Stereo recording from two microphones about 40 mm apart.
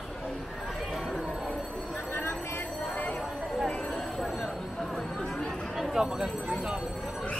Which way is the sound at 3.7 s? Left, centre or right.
Left.